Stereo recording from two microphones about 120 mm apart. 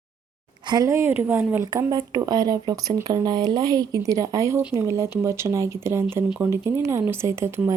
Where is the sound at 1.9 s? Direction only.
35° right (ahead or behind).